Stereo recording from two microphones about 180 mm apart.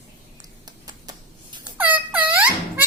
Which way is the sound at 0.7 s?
20° right (ahead or behind).